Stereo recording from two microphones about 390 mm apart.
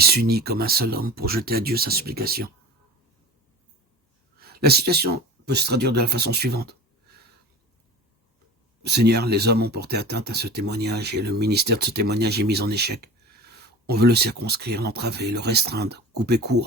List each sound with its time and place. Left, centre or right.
0.0 s speech: right
4.4 s speech: right
8.8 s speech: right